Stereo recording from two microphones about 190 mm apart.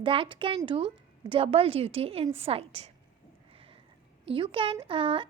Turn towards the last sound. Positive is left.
turn(degrees=-25)  # may be behind; listen again after turning